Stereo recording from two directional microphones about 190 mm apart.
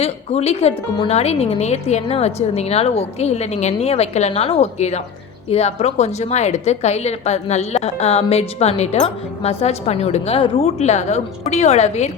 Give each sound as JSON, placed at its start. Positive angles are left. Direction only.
{"t": 0.0, "sound": "a woman's voice", "side_deg": 30}